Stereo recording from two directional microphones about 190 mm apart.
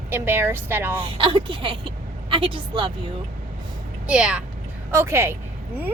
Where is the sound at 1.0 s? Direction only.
30° right (ahead or behind).